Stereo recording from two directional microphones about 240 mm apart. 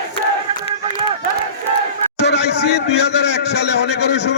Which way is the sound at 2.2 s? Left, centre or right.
Left.